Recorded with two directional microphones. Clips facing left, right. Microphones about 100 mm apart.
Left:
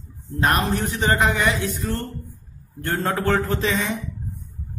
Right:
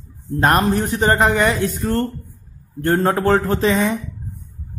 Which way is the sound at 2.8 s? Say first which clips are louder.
Right 6 dB; 35° right (ahead or behind).